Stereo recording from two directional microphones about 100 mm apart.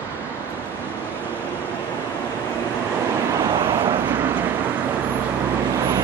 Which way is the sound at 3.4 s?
25° right (ahead or behind).